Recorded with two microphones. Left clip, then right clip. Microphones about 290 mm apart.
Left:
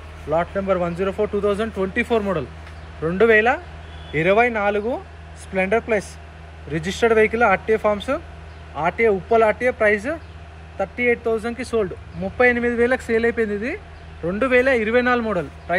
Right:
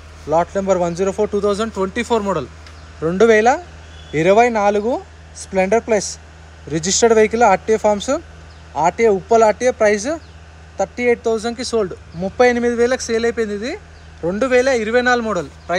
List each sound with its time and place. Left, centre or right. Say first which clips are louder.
0.3 s speech: right 4 dB; centre